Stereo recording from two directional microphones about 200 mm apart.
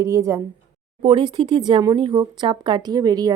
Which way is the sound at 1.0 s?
25° right (ahead or behind).